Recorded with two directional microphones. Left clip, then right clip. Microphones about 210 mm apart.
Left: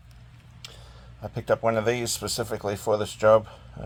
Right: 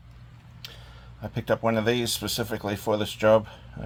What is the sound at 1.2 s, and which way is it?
Speech, centre (ahead or behind).